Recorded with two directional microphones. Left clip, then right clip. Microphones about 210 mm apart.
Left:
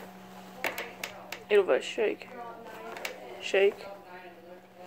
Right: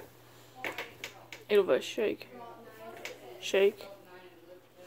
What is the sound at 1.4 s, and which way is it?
Speech, 45° right (ahead or behind).